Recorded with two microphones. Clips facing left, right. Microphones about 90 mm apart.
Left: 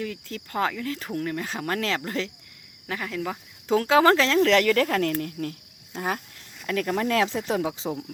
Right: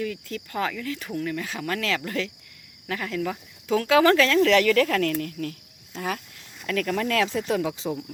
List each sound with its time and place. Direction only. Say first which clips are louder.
0.0 s speech: right 2 dB; 30° left (ahead or behind)
2.8 s speech: right 2 dB; 15° left (ahead or behind)
3.2 s speech: right 2 dB; 25° left (ahead or behind)
6.7 s speech: even; 25° left (ahead or behind)